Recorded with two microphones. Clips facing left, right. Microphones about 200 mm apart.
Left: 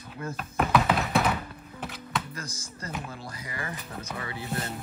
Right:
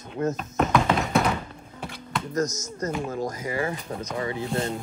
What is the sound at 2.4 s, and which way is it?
Chopping, 30° left (ahead or behind).